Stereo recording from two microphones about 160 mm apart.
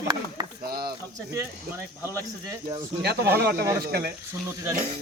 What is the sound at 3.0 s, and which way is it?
Speech, 85° right.